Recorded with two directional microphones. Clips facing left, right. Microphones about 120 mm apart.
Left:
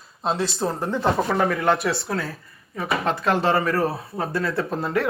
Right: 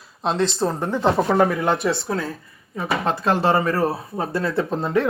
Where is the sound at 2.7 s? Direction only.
30° right (ahead or behind).